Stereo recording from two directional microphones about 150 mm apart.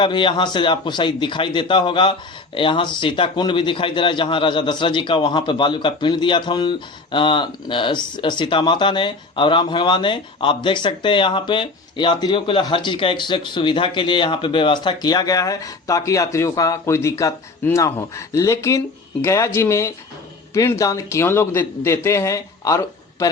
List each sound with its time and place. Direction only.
0.0 s a man's voice: 35° left (ahead or behind)